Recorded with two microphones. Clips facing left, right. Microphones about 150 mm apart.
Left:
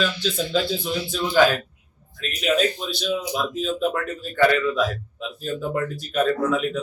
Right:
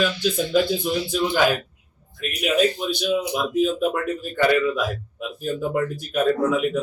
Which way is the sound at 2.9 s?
15° right (ahead or behind).